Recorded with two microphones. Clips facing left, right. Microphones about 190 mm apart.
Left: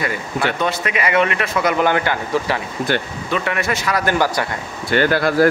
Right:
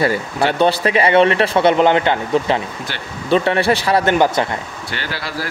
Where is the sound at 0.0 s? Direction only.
30° right (ahead or behind).